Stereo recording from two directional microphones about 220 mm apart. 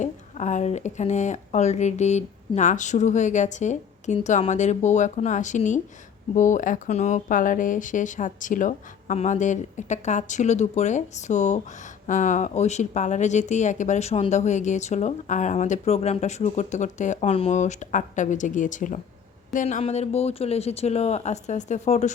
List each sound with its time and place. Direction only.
0.0 s speech: 35° left (ahead or behind)